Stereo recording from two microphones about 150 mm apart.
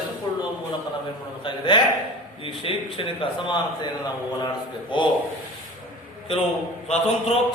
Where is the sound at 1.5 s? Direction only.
35° left (ahead or behind).